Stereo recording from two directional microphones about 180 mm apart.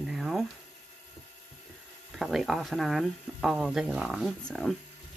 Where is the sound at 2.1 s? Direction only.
Centre (ahead or behind).